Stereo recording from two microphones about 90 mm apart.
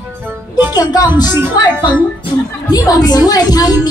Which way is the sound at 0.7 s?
50° left (ahead or behind).